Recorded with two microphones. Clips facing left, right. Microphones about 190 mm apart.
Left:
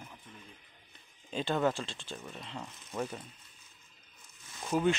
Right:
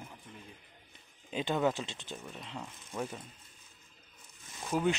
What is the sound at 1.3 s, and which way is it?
Speech, 15° right (ahead or behind).